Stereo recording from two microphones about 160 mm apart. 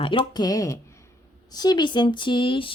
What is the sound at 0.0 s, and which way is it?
Speech, 30° left (ahead or behind).